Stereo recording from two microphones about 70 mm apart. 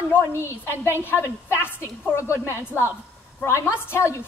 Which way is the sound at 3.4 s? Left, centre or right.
Left.